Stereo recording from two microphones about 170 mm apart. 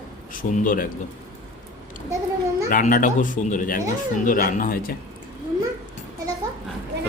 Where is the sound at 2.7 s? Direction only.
55° left (ahead or behind).